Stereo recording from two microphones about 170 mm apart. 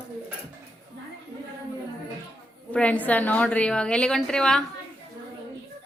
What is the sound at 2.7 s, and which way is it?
A woman's voice, 5° left (ahead or behind).